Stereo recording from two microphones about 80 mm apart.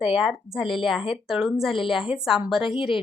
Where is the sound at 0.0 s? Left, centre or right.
Centre.